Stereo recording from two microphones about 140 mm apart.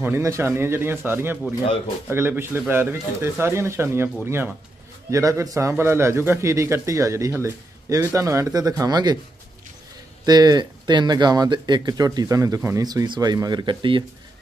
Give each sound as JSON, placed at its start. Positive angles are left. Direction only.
{"t": 0.0, "sound": "speech", "side_deg": -20}
{"t": 10.2, "sound": "speech", "side_deg": -30}